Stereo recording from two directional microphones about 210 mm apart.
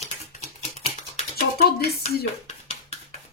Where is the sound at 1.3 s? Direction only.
45° left (ahead or behind).